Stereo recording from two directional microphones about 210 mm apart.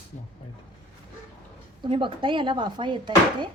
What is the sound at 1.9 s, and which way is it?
Speech, 25° right (ahead or behind).